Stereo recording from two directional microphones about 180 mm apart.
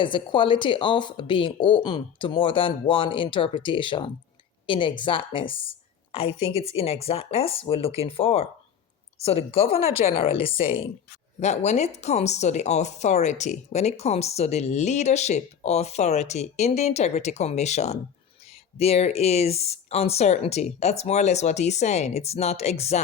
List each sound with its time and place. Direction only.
0.0 s speech: 25° left (ahead or behind)